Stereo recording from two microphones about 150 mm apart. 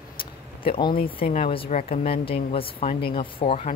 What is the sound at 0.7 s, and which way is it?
Speech, 30° left (ahead or behind).